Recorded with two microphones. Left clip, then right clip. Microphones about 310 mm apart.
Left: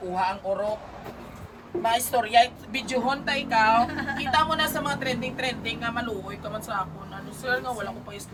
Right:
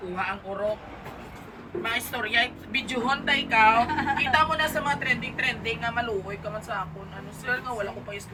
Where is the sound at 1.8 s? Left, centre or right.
Centre.